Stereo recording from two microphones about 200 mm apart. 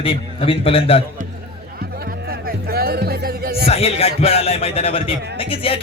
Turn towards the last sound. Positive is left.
turn(degrees=25)  # may be behind; listen again after turning